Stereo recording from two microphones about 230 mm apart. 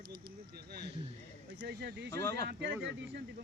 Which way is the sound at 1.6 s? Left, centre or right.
Right.